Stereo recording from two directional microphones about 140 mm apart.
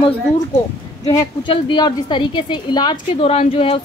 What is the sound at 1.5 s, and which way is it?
A woman's voice, 35° left (ahead or behind).